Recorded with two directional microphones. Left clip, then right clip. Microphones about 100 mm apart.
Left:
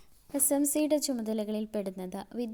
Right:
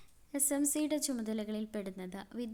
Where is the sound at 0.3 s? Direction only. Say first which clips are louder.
Left 6 dB; 35° left (ahead or behind).